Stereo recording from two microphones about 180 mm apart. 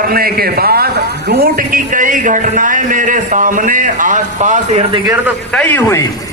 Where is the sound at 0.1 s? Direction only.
55° right (ahead or behind); by 4.9 s 35° right (ahead or behind).